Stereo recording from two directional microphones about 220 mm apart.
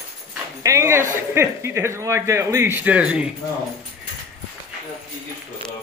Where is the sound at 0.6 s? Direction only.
15° right (ahead or behind).